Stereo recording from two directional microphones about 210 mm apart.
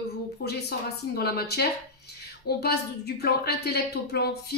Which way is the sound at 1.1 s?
50° left (ahead or behind).